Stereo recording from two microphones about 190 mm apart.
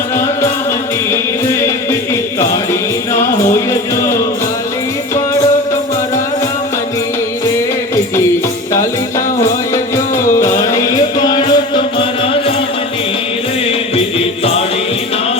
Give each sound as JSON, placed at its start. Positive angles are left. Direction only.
{"t": 1.1, "sound": "music", "side_deg": 15}
{"t": 3.1, "sound": "music", "side_deg": 15}
{"t": 11.3, "sound": "music", "side_deg": 25}
{"t": 13.7, "sound": "music", "side_deg": 30}